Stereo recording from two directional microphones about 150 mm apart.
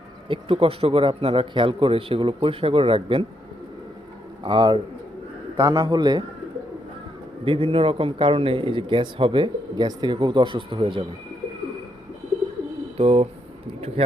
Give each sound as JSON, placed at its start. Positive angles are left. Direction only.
{"t": 0.3, "sound": "a man's voice", "side_deg": -35}
{"t": 4.4, "sound": "a man's voice", "side_deg": -30}
{"t": 5.5, "sound": "a man's voice", "side_deg": -20}
{"t": 7.4, "sound": "a man's voice", "side_deg": -35}
{"t": 13.0, "sound": "speech", "side_deg": -40}